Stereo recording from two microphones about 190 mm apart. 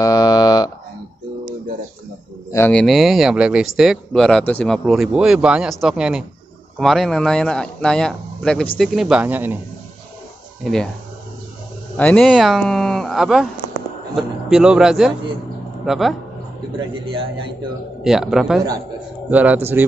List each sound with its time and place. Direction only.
0.0 s a sound: 20° left (ahead or behind)
2.5 s speech: 10° left (ahead or behind); by 9.6 s 10° right (ahead or behind)
10.6 s speech: 5° left (ahead or behind)
12.0 s speech: 5° left (ahead or behind)
16.7 s a man's voice: 25° right (ahead or behind)
18.0 s a man's voice: centre (ahead or behind)